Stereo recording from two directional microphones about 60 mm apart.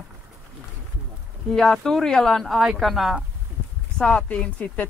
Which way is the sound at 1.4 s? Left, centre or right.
Centre.